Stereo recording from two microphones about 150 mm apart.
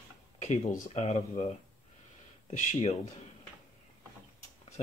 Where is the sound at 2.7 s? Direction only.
45° left (ahead or behind).